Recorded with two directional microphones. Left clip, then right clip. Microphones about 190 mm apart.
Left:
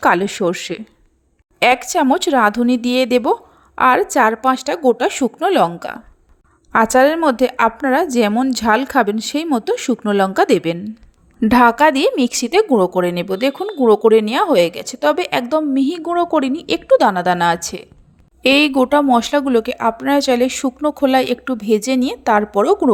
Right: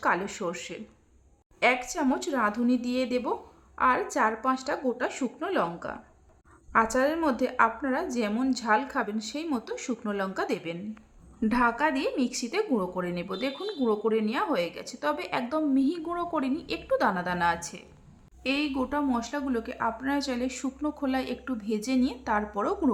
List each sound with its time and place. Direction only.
0.0 s a woman's voice: 40° left (ahead or behind)